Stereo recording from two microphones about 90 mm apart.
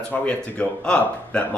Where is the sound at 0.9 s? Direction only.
10° left (ahead or behind).